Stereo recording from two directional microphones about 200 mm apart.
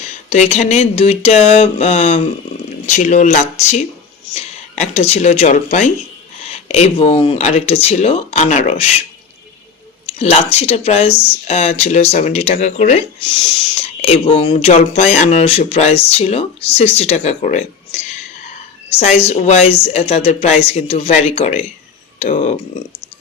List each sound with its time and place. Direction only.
0.0 s speech: 35° left (ahead or behind)
10.1 s speech: 30° left (ahead or behind)